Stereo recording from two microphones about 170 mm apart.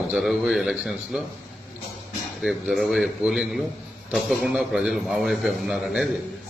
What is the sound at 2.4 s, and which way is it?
A man's voice, centre (ahead or behind).